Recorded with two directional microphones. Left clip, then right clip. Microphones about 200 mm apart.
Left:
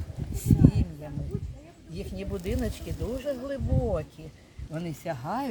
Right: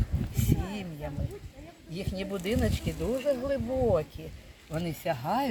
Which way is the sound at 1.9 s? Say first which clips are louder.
Right 1 dB; 15° right (ahead or behind).